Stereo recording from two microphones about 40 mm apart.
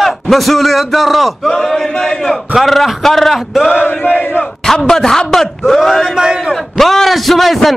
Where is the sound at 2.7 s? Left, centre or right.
Centre.